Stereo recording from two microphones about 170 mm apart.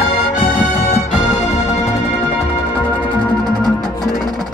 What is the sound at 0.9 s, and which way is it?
Music, 40° left (ahead or behind).